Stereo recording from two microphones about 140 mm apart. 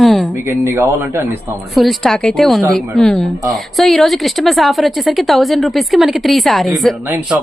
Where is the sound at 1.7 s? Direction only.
Centre (ahead or behind).